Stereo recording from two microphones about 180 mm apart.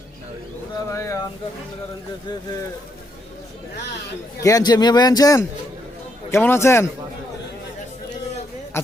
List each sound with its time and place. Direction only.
0.9 s pigeon: 15° left (ahead or behind)
4.4 s a man's voice: 20° left (ahead or behind)
8.7 s speech: 15° left (ahead or behind)